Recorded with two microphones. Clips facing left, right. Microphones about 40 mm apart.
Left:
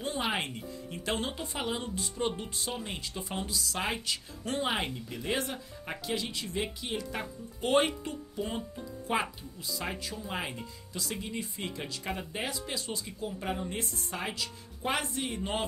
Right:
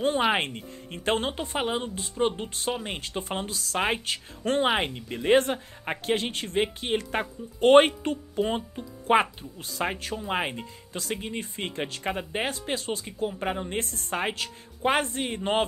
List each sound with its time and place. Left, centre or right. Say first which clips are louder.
0.0 s speech: right 8 dB; right
2.5 s speech: right 6 dB; right